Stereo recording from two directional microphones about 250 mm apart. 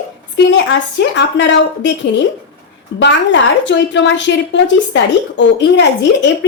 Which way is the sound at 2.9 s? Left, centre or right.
Left.